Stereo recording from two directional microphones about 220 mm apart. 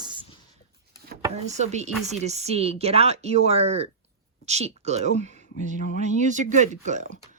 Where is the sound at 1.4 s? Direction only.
30° right (ahead or behind).